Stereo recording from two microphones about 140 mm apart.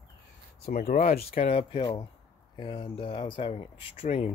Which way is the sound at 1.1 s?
90° left.